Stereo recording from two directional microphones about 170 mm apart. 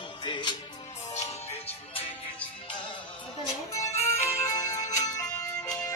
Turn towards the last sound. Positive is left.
turn(degrees=20)  # may be behind; listen again after turning